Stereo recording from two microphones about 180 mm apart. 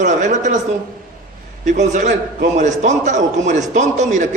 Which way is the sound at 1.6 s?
40° right (ahead or behind).